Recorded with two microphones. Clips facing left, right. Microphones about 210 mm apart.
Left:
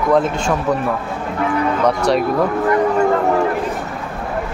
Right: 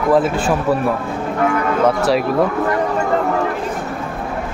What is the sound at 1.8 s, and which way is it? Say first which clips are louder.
Speech: right 2 dB; 5° right (ahead or behind).